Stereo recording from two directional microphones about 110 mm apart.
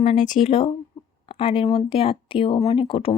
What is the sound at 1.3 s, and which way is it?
Speech, 55° left (ahead or behind).